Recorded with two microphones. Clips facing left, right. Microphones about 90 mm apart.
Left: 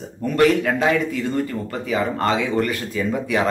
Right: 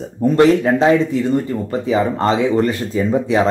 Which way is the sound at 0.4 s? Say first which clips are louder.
Right 4 dB; 25° right (ahead or behind).